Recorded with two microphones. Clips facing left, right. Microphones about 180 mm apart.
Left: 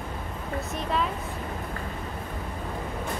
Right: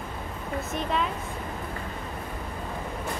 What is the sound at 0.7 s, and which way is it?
Speech, centre (ahead or behind).